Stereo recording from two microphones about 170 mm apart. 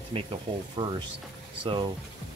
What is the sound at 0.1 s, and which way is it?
Speech, 30° right (ahead or behind).